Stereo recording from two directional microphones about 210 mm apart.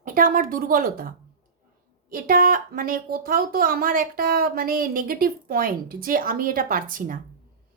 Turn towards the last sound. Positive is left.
turn(degrees=-40)  # may be behind; listen again after turning